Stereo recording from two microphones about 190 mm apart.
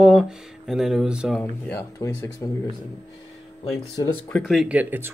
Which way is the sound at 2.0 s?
15° left (ahead or behind).